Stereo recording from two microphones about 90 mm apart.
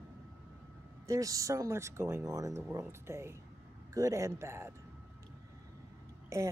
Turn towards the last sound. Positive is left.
turn(degrees=-30)  # may be behind; listen again after turning